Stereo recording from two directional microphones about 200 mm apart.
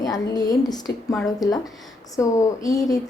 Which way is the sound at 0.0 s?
20° left (ahead or behind).